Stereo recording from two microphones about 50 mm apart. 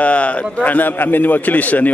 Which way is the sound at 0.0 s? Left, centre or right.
Left.